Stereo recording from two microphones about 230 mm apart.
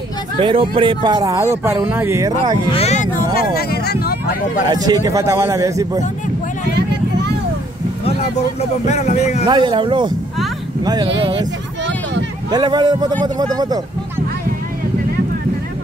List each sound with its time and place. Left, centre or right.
0.4 s speech: right
2.7 s speech: left
3.3 s speech: left
4.7 s speech: centre
8.8 s speech: left
9.5 s speech: right
12.4 s speech: centre